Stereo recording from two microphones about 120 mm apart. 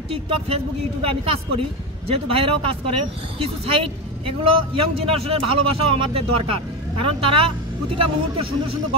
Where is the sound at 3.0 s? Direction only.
50° right (ahead or behind).